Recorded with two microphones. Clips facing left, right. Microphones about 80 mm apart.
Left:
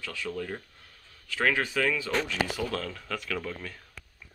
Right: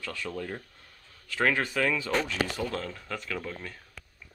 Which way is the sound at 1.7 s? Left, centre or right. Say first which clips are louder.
Even; centre.